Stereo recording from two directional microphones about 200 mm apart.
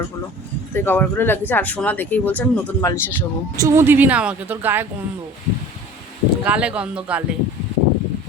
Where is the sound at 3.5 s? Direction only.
15° right (ahead or behind).